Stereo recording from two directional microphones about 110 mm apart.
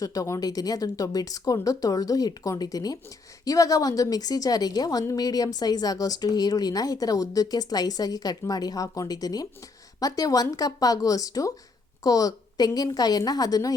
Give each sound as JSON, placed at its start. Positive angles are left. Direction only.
{"t": 0.0, "sound": "a woman's voice", "side_deg": 30}